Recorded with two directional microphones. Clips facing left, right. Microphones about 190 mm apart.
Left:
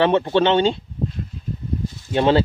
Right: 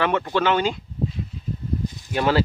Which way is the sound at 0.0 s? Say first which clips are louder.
Left 5 dB; 30° left (ahead or behind).